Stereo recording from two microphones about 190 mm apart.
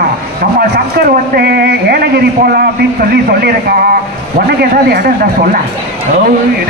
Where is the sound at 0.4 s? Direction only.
55° right (ahead or behind).